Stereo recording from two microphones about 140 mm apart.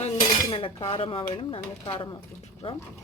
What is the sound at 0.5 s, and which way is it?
Speech, 35° left (ahead or behind).